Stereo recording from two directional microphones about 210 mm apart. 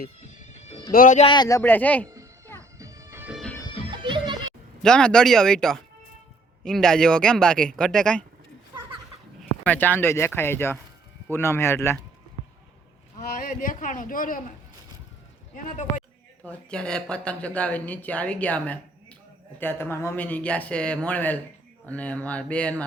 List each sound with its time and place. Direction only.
0.9 s speech: 40° left (ahead or behind)
1.3 s speech: 20° left (ahead or behind)
2.6 s music: 15° right (ahead or behind)
3.4 s music: 10° left (ahead or behind)
3.9 s music: 20° right (ahead or behind)
4.8 s a man's voice: 5° left (ahead or behind)
9.4 s speech: 5° left (ahead or behind)
13.1 s speech: 40° left (ahead or behind)
15.5 s speech: 35° left (ahead or behind)
16.4 s speech: 5° left (ahead or behind)